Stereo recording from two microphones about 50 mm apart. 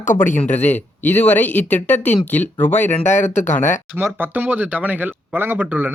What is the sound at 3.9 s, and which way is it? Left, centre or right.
Speech, right.